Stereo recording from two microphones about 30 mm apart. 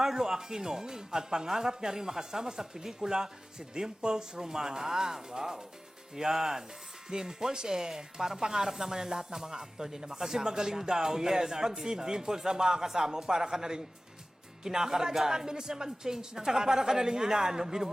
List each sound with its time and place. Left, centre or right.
0.0 s speech: centre
8.4 s speech: right